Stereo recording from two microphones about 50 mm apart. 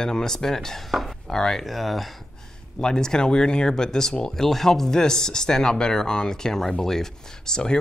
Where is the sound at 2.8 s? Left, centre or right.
Centre.